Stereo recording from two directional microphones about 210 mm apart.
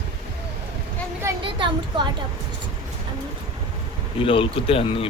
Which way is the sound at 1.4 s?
25° right (ahead or behind).